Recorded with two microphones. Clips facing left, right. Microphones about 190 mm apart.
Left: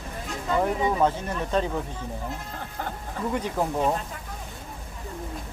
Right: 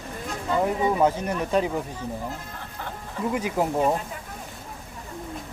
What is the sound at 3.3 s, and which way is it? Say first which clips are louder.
Speech: right 2 dB; 5° right (ahead or behind).